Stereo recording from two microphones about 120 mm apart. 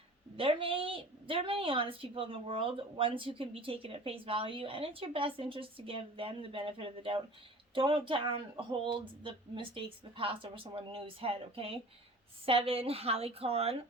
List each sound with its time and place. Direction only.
0.3 s a woman's voice: 50° right (ahead or behind)